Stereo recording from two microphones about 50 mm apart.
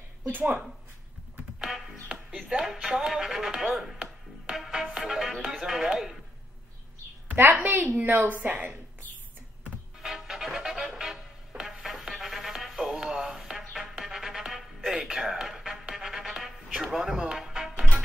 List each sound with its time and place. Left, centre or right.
1.6 s music: centre
2.5 s speech: centre
7.5 s a woman's voice: right
10.0 s music: centre